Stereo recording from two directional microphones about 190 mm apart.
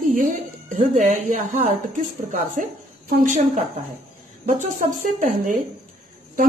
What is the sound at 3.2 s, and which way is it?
Speech, 40° right (ahead or behind).